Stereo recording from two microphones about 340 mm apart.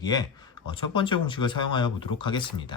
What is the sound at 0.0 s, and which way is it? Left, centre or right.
Speech, centre.